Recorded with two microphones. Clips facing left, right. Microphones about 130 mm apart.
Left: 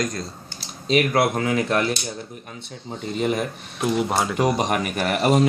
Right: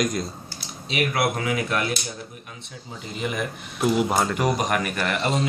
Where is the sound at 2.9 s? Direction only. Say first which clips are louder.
Left 6 dB; 40° left (ahead or behind).